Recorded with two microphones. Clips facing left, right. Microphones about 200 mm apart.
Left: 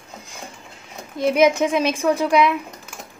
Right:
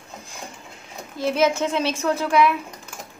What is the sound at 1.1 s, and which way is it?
A child's voice, 15° left (ahead or behind).